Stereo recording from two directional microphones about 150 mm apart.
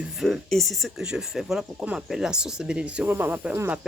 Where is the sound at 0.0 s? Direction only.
5° right (ahead or behind).